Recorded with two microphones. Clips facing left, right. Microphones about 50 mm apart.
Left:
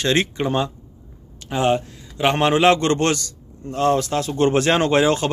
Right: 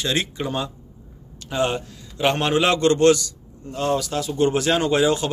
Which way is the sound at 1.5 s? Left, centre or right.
Centre.